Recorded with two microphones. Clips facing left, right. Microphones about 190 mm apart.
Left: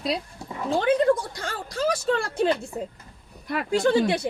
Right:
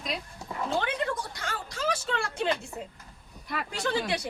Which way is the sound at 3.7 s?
30° left (ahead or behind).